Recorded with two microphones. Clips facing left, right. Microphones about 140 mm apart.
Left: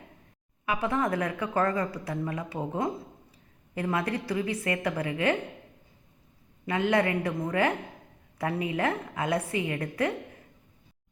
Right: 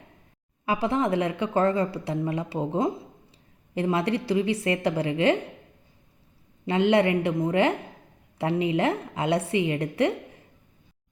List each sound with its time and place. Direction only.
0.6 s a woman's voice: 30° right (ahead or behind)
6.7 s a woman's voice: 30° right (ahead or behind)